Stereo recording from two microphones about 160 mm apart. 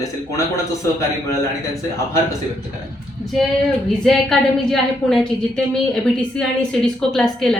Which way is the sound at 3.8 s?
Centre (ahead or behind).